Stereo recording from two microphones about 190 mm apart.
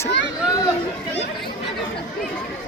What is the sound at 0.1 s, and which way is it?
Chatter, 70° left (ahead or behind).